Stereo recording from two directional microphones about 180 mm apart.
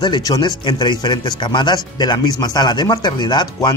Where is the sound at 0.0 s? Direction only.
25° left (ahead or behind).